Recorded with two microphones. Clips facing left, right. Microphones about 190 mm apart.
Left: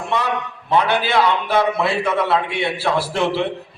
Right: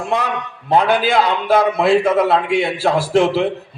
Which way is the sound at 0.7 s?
45° right (ahead or behind).